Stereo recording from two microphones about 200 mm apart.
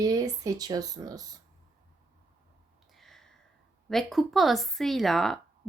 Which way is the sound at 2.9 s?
Centre (ahead or behind).